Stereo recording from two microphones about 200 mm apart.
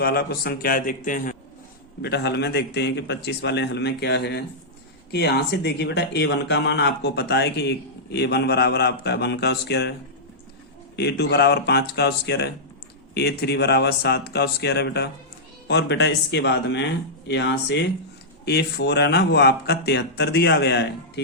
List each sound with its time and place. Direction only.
0.0 s a man's voice: 50° left (ahead or behind)
2.0 s speech: 55° left (ahead or behind)
10.9 s speech: 55° left (ahead or behind)